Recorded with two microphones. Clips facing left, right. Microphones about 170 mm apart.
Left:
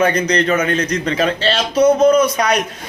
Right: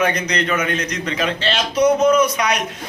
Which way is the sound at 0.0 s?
30° left (ahead or behind).